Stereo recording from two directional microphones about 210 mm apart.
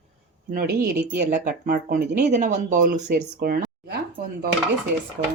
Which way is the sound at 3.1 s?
50° right (ahead or behind).